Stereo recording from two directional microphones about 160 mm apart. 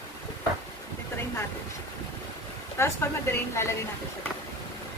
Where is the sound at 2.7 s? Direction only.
15° left (ahead or behind).